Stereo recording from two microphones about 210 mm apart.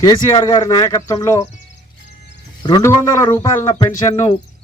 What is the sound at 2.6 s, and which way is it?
A man's voice, 15° left (ahead or behind).